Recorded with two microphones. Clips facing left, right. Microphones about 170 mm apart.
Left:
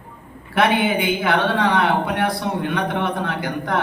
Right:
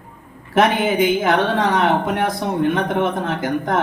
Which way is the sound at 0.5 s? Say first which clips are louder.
Right 2 dB; 40° right (ahead or behind).